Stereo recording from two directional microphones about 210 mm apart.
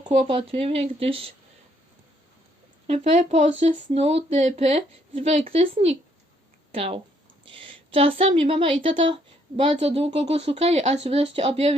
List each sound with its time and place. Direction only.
0.1 s speech: 30° right (ahead or behind)
2.8 s a woman's voice: 30° right (ahead or behind)